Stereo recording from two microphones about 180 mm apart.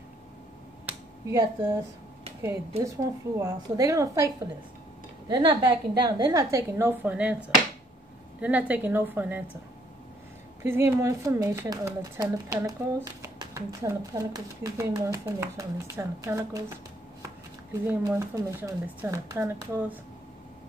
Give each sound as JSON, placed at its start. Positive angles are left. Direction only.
{"t": 0.8, "sound": "speech", "side_deg": -15}
{"t": 5.3, "sound": "speech", "side_deg": -25}
{"t": 10.6, "sound": "speech", "side_deg": -15}
{"t": 17.8, "sound": "speech", "side_deg": -15}